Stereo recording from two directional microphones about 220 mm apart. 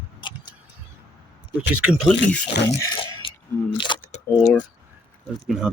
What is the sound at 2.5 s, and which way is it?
Speech, 50° left (ahead or behind).